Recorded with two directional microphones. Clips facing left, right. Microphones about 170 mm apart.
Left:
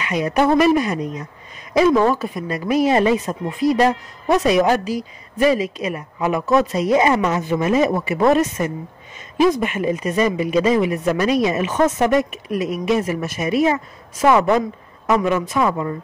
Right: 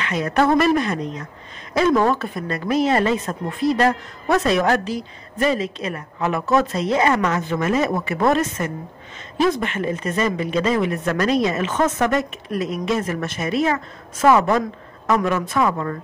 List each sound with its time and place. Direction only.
0.0 s speech: 15° left (ahead or behind)